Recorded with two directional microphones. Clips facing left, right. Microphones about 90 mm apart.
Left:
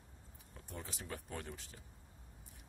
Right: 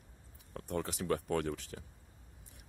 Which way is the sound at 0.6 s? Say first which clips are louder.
Right 12 dB; 70° right (ahead or behind).